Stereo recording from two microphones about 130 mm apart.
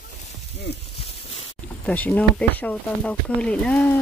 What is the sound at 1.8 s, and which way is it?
Speech, 10° left (ahead or behind).